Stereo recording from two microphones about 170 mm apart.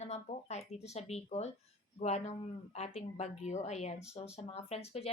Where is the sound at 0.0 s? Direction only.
40° left (ahead or behind).